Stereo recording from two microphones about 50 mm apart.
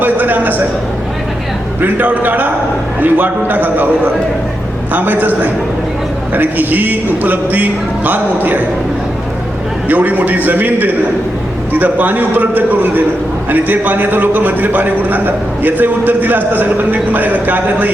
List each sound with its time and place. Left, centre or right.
0.0 s a sound: right
1.8 s a man's voice: right
6.3 s a man's voice: right
9.9 s a man's voice: right